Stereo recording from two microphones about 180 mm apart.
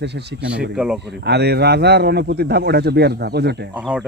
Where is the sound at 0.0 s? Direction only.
70° right (ahead or behind).